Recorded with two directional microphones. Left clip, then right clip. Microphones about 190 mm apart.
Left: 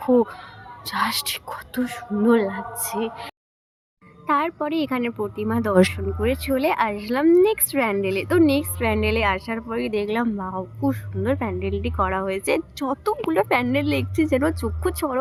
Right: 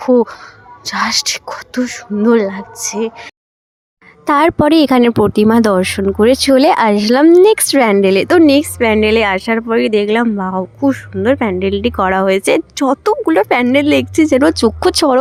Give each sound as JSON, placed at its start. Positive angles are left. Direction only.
{"t": 0.0, "sound": "a woman's voice", "side_deg": -30}
{"t": 4.3, "sound": "a woman's voice", "side_deg": -65}